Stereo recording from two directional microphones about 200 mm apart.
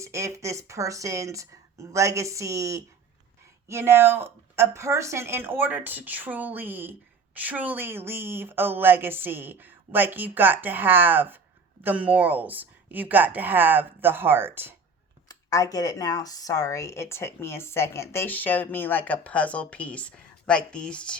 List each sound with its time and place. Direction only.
0.0 s a woman's voice: 15° right (ahead or behind)
15.3 s speech: 15° left (ahead or behind)